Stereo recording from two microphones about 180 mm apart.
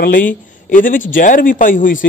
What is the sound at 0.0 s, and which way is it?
A man's voice, 50° left (ahead or behind).